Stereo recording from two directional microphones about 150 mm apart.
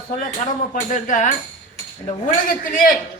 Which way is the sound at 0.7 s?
60° left (ahead or behind).